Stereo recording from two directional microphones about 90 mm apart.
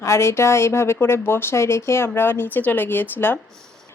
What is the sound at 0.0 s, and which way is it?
Speech, 30° left (ahead or behind).